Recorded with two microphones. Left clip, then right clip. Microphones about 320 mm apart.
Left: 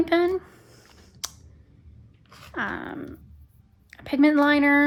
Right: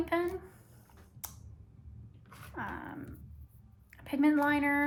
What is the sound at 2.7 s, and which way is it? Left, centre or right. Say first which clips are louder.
A woman's voice: left 9 dB; left.